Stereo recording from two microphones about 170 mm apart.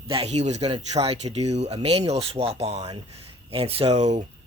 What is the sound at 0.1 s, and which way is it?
Speech, 35° right (ahead or behind).